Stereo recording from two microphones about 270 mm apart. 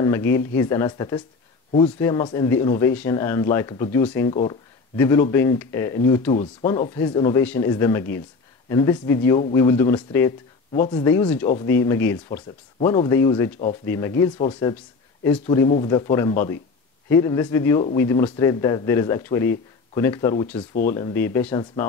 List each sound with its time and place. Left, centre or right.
0.0 s speech: centre
4.3 s speech: left
4.9 s speech: centre